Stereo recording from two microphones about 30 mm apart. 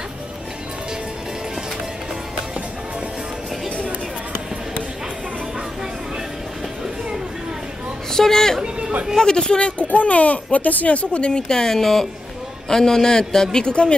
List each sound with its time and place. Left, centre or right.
3.6 s chatter: left
8.1 s a sound: centre
9.2 s speech: left
9.8 s speech: left
11.4 s a man's voice: centre